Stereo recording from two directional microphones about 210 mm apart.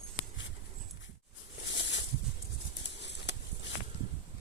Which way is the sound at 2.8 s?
55° left (ahead or behind).